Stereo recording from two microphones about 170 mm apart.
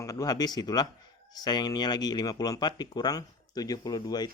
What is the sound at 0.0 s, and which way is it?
Speech, 20° left (ahead or behind).